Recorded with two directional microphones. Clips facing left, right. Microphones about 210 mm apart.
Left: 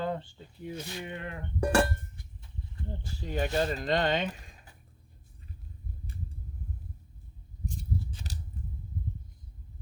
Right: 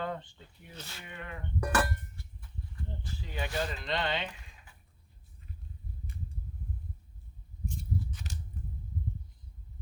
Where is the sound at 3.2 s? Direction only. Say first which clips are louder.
Left 6 dB; 40° left (ahead or behind).